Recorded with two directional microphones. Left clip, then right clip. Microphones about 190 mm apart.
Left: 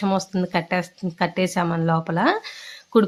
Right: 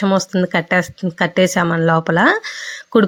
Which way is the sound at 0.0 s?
25° right (ahead or behind).